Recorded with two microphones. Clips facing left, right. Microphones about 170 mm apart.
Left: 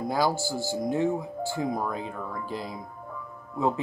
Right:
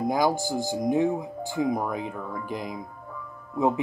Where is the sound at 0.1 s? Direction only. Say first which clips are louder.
Even; 15° right (ahead or behind).